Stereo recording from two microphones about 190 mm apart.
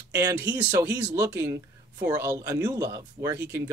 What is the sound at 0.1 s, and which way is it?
Speech, 15° right (ahead or behind).